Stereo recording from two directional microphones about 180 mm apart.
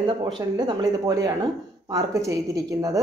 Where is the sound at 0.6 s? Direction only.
20° right (ahead or behind).